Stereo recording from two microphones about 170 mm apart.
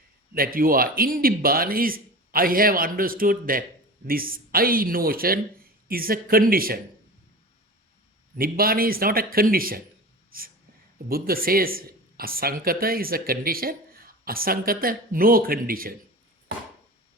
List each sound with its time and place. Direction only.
0.3 s speech: 60° right (ahead or behind)
8.4 s speech: 60° right (ahead or behind)